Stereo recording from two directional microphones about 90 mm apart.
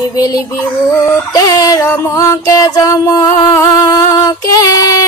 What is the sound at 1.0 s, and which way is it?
Music, 40° left (ahead or behind).